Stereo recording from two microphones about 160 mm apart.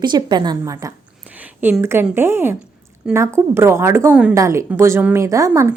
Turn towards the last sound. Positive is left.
turn(degrees=-20)  # may be behind; listen again after turning